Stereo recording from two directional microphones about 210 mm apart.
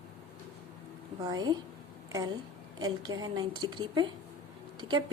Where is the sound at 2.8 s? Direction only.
20° right (ahead or behind).